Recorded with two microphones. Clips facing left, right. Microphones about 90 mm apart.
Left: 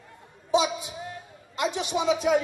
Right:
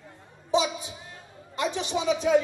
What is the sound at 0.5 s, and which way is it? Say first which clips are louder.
Speech: left 1 dB; 15° left (ahead or behind).